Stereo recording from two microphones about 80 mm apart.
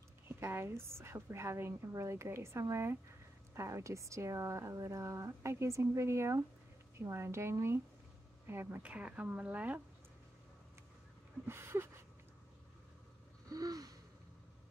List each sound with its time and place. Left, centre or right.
0.3 s speech: right
8.8 s speech: centre
11.4 s a sound: right
13.5 s gasp: right